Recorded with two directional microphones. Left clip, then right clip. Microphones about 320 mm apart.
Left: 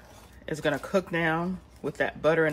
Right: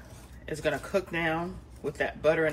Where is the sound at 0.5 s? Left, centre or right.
Left.